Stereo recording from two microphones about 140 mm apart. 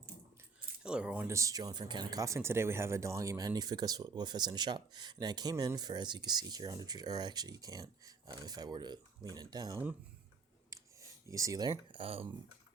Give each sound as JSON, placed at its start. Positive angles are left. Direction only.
{"t": 0.8, "sound": "speech", "side_deg": -5}
{"t": 1.3, "sound": "speech", "side_deg": -20}
{"t": 10.7, "sound": "clicking", "side_deg": -20}
{"t": 11.3, "sound": "speech", "side_deg": -25}